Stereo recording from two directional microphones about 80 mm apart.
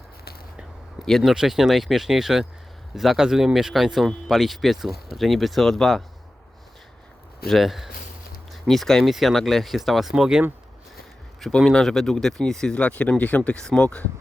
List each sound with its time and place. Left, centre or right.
1.0 s speech: centre
7.4 s speech: centre
11.6 s speech: centre